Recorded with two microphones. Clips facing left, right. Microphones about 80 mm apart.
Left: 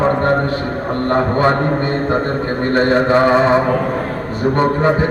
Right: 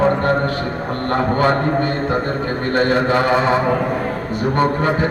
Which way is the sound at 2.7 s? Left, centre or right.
Left.